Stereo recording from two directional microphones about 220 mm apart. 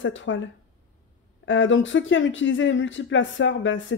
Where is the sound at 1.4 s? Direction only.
55° left (ahead or behind).